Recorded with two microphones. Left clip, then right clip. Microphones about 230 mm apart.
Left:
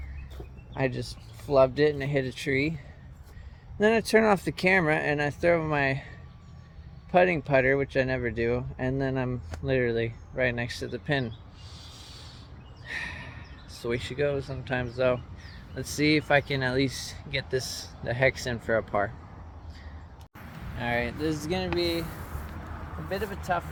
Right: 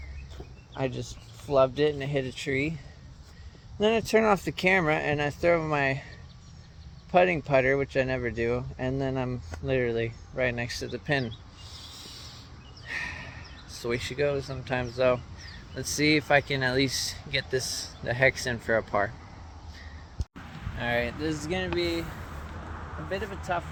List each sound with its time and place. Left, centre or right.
0.7 s speech: centre
3.8 s speech: centre
7.1 s speech: centre
11.7 s a sound: centre
15.7 s speech: centre
20.7 s speech: centre; by 22.0 s left
23.0 s speech: left